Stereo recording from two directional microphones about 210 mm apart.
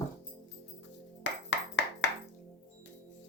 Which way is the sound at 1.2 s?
55° left (ahead or behind).